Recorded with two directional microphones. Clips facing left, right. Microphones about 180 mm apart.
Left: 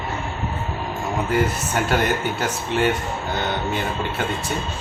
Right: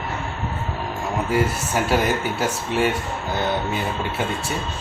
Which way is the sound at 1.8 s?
5° right (ahead or behind).